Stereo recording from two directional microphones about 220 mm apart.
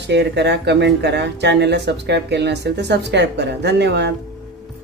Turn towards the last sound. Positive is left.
turn(degrees=-50)  # may be behind; listen again after turning